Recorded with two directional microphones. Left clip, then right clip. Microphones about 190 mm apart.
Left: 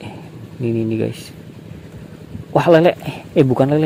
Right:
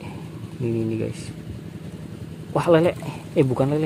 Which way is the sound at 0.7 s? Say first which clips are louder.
Left 6 dB; 20° left (ahead or behind).